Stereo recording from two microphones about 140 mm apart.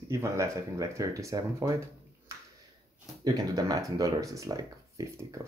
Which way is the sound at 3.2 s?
25° right (ahead or behind).